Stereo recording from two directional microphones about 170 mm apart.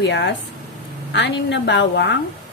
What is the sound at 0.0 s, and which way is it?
A woman's voice, 90° left.